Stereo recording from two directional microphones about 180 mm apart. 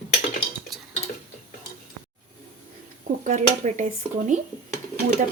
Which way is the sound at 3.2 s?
45° right (ahead or behind).